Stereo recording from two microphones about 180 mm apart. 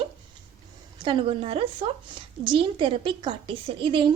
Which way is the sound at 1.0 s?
30° right (ahead or behind).